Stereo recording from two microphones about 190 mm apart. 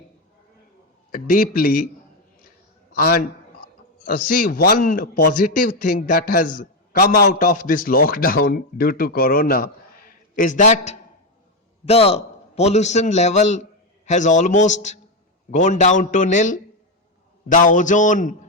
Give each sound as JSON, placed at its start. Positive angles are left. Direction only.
{"t": 1.1, "sound": "a man's voice", "side_deg": 50}
{"t": 2.9, "sound": "a man's voice", "side_deg": 50}